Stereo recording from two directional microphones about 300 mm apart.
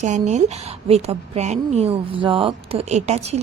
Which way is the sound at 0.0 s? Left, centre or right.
Right.